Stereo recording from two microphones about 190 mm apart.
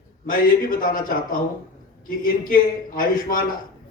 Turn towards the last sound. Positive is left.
turn(degrees=50)  # may be behind; listen again after turning